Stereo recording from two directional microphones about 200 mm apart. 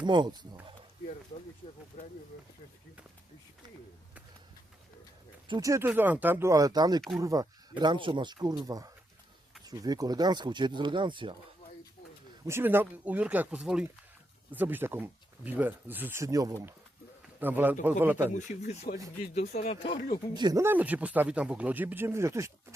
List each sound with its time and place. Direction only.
0.0 s speech: 20° right (ahead or behind)
5.5 s speech: 15° right (ahead or behind)
12.5 s speech: 10° right (ahead or behind)
18.3 s speech: 35° left (ahead or behind)
20.3 s speech: 20° right (ahead or behind)